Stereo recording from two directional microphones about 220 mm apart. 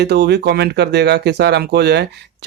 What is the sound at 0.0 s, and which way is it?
Speech, 50° right (ahead or behind).